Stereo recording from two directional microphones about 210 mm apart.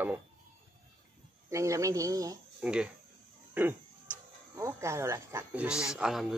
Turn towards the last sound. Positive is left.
turn(degrees=0)  # may be behind; listen again after turning